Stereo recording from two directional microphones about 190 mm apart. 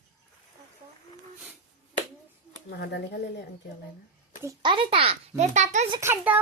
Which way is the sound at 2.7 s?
60° left (ahead or behind).